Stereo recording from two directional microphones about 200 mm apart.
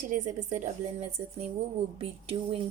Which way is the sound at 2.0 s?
30° right (ahead or behind).